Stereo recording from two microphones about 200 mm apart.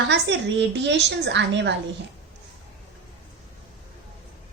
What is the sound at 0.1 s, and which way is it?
A woman's voice, 60° right (ahead or behind).